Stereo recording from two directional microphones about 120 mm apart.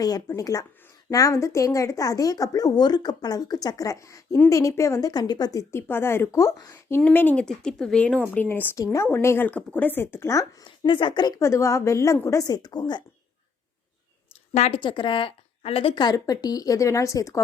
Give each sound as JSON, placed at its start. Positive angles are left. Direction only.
{"t": 0.0, "sound": "speech", "side_deg": 30}
{"t": 7.0, "sound": "speech", "side_deg": 15}
{"t": 10.6, "sound": "speech", "side_deg": 45}
{"t": 11.3, "sound": "speech", "side_deg": 25}
{"t": 14.7, "sound": "a woman's voice", "side_deg": 40}
{"t": 16.0, "sound": "speech", "side_deg": 30}